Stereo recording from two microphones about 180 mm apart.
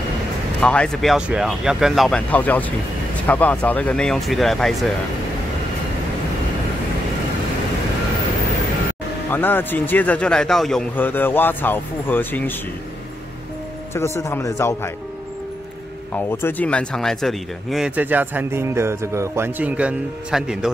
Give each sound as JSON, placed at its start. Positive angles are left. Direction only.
{"t": 0.6, "sound": "speech", "side_deg": 5}
{"t": 9.3, "sound": "a man's voice", "side_deg": 10}
{"t": 13.9, "sound": "a man's voice", "side_deg": 15}
{"t": 16.3, "sound": "speech", "side_deg": 10}